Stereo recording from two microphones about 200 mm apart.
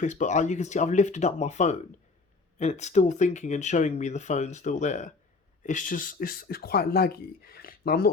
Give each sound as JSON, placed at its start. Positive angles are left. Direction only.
{"t": 0.0, "sound": "speech", "side_deg": 40}